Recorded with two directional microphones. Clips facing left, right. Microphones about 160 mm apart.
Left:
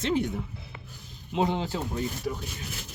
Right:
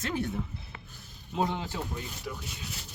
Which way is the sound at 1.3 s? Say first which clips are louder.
Left 4 dB; 25° left (ahead or behind).